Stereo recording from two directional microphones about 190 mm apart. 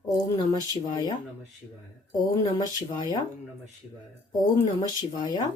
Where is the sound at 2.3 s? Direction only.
20° left (ahead or behind).